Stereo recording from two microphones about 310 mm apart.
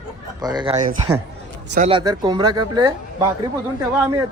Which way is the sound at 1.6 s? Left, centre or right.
Right.